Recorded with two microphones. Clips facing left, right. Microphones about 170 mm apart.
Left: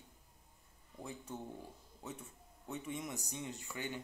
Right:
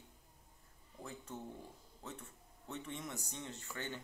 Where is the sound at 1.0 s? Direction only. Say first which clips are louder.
Left 2 dB; 10° left (ahead or behind).